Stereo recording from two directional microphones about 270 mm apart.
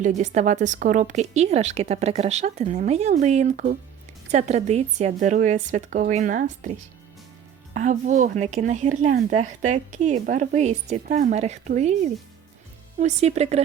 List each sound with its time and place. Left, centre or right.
0.0 s a woman's voice: right
7.7 s a woman's voice: right
13.0 s a woman's voice: right